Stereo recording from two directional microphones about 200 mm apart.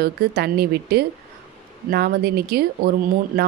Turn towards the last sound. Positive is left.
turn(degrees=-50)  # may be behind; listen again after turning